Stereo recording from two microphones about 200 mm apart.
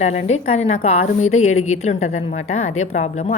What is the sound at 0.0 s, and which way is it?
A woman's voice, 35° left (ahead or behind).